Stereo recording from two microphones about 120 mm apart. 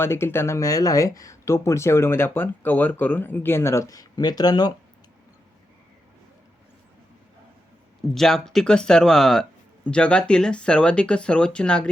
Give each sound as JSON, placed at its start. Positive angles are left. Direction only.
{"t": 0.0, "sound": "speech", "side_deg": 20}
{"t": 8.1, "sound": "speech", "side_deg": 5}